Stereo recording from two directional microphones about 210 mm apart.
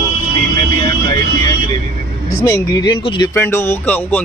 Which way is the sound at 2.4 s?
15° left (ahead or behind).